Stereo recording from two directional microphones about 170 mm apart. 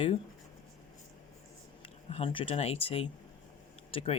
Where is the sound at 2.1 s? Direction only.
30° left (ahead or behind).